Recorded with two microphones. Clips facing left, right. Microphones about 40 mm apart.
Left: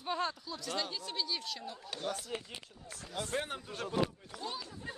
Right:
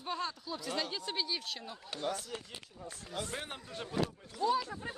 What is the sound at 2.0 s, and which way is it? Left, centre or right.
Speech, centre.